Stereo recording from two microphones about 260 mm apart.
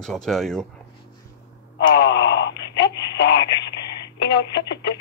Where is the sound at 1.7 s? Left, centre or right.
Left.